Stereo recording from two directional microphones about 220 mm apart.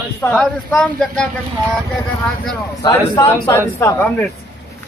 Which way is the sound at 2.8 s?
15° left (ahead or behind).